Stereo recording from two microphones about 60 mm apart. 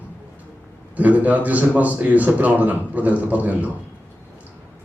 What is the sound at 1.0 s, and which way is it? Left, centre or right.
A man's voice, right.